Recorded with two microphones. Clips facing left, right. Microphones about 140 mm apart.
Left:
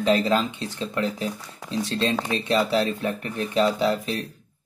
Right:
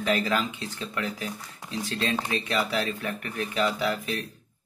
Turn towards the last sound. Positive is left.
turn(degrees=30)  # may be behind; listen again after turning